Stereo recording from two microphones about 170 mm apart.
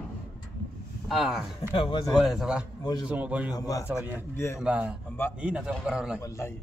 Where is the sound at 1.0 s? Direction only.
Centre (ahead or behind).